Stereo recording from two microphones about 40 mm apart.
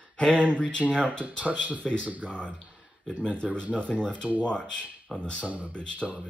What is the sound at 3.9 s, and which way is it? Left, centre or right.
Speech, left.